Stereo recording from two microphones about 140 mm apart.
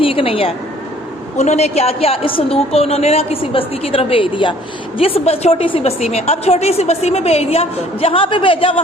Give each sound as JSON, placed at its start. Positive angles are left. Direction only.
{"t": 0.0, "sound": "speech", "side_deg": 40}
{"t": 1.4, "sound": "a woman's voice", "side_deg": 50}